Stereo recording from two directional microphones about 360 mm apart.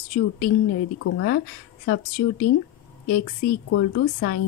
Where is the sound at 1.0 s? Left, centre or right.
Left.